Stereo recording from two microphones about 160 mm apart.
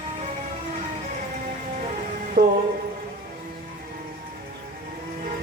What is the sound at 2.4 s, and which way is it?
Music, 50° right (ahead or behind).